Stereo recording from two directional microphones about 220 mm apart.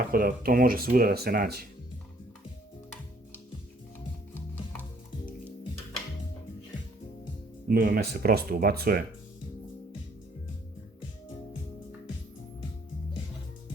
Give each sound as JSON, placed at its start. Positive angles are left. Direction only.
{"t": 0.1, "sound": "speech", "side_deg": -40}
{"t": 4.4, "sound": "music", "side_deg": 10}
{"t": 7.7, "sound": "speech", "side_deg": -45}